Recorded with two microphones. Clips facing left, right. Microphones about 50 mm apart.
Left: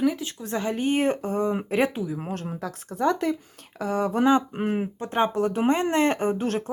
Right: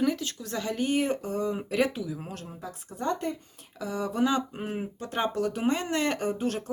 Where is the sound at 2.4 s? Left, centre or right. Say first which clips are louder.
Left 7 dB; left.